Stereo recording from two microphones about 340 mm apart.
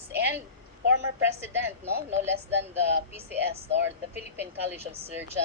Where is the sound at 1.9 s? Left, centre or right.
Right.